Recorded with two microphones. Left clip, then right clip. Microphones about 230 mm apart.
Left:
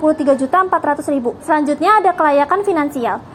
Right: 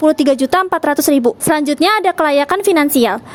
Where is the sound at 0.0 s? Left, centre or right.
Right.